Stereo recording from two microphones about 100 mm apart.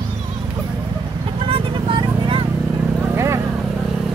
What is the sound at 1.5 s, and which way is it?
Vehicle, 60° right (ahead or behind).